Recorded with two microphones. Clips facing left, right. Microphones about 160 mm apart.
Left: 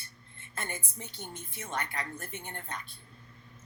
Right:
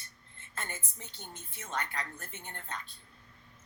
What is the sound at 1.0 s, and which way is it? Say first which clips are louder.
Speech: left 5 dB; 15° left (ahead or behind).